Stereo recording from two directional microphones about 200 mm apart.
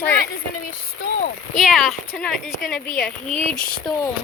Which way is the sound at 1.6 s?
Centre (ahead or behind).